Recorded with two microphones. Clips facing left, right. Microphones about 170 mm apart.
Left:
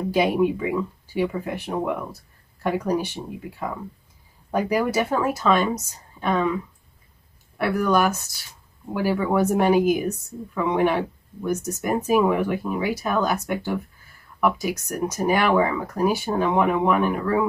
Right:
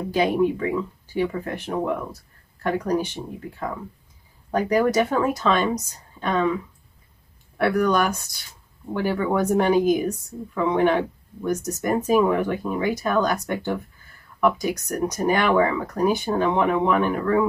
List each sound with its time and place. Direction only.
0.1 s a woman's voice: 10° left (ahead or behind)
7.5 s a woman's voice: 5° left (ahead or behind)